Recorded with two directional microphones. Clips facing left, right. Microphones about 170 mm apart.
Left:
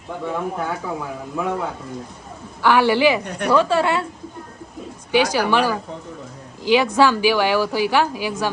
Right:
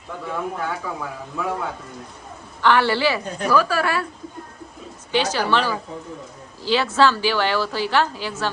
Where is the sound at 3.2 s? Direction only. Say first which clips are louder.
Left 1 dB; 70° left (ahead or behind).